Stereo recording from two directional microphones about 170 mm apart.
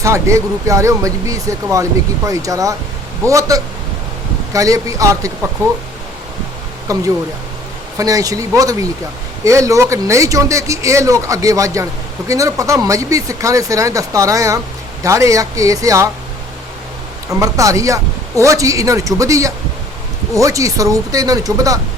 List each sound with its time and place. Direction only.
0.0 s speech: 15° right (ahead or behind)
6.9 s speech: 20° right (ahead or behind)
17.4 s speech: 20° right (ahead or behind)